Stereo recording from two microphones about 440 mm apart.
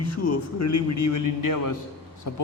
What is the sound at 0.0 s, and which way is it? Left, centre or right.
A man's voice, left.